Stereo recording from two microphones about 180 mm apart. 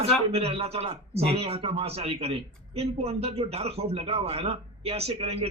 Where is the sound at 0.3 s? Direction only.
35° right (ahead or behind).